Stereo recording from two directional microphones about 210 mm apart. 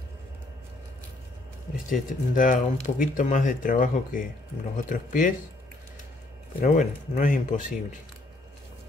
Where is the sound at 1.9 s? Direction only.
40° left (ahead or behind).